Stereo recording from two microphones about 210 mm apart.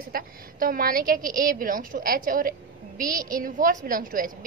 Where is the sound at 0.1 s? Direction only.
45° right (ahead or behind).